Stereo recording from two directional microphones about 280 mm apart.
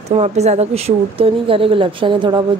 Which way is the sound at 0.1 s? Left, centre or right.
Right.